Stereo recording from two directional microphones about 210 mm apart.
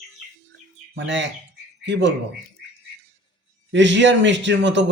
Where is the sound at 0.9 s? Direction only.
60° right (ahead or behind).